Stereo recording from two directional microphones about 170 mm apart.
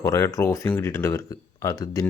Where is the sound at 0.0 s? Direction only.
20° left (ahead or behind).